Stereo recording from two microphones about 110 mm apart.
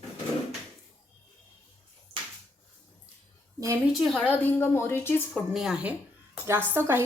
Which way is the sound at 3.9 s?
5° left (ahead or behind).